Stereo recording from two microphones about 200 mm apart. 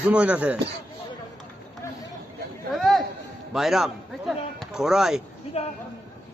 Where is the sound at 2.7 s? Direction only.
Centre (ahead or behind).